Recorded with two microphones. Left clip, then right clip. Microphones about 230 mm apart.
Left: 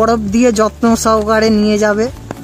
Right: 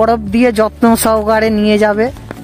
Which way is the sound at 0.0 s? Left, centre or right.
Right.